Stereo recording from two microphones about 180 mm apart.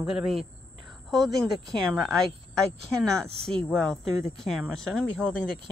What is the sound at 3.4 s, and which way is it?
Speech, 5° left (ahead or behind).